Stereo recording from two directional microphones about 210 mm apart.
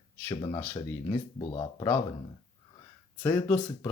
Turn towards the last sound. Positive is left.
turn(degrees=10)  # may be behind; listen again after turning